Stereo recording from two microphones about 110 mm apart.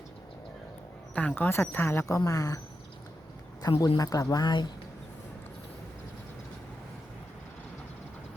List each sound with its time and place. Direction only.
1.1 s speech: 15° left (ahead or behind); by 2.6 s 30° left (ahead or behind)
3.6 s a woman's voice: 35° left (ahead or behind)